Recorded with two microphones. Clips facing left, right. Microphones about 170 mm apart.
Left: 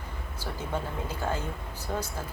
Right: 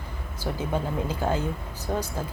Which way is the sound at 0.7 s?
10° right (ahead or behind).